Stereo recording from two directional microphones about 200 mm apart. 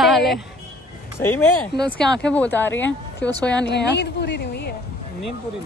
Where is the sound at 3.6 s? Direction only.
60° left (ahead or behind).